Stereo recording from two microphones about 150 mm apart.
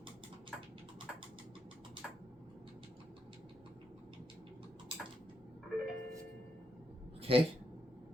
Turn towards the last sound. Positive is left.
turn(degrees=-40)  # may be behind; listen again after turning